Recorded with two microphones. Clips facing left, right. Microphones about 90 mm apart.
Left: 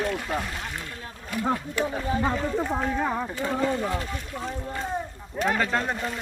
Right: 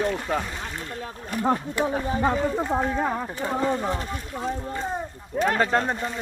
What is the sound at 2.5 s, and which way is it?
Speech, 10° right (ahead or behind).